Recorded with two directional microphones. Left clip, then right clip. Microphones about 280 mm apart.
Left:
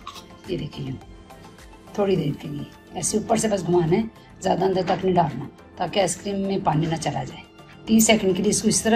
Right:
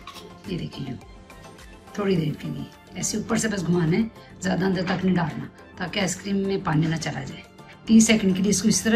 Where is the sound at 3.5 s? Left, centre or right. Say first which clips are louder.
Left 5 dB; centre.